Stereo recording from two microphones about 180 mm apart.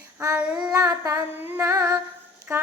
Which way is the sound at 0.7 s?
20° right (ahead or behind).